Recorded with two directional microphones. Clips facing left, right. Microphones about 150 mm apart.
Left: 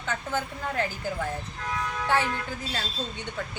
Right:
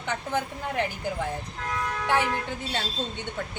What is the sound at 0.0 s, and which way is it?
Speech, 20° right (ahead or behind).